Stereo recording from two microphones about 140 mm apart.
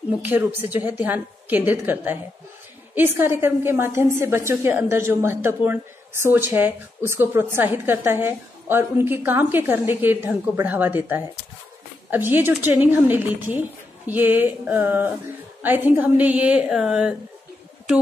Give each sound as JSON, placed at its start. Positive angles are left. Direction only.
{"t": 0.2, "sound": "a woman's voice", "side_deg": -15}